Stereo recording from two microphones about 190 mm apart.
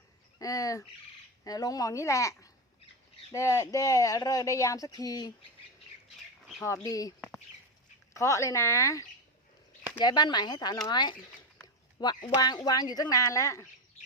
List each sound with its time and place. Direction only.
0.3 s speech: 20° left (ahead or behind)
6.6 s speech: 10° left (ahead or behind)
7.2 s bird: centre (ahead or behind)
8.1 s speech: 15° left (ahead or behind)